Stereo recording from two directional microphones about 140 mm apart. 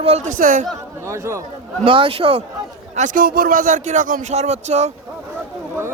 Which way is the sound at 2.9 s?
65° right (ahead or behind).